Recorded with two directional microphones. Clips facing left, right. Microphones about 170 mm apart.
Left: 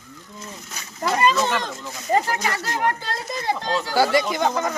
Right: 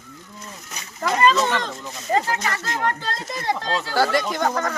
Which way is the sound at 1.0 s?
10° left (ahead or behind).